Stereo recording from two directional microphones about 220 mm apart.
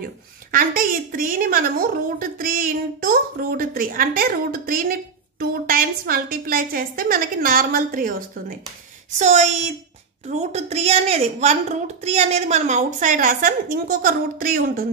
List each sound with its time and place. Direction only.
0.5 s a woman's voice: 40° right (ahead or behind)